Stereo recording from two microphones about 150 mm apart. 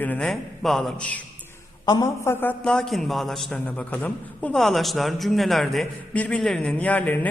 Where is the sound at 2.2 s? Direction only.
15° left (ahead or behind).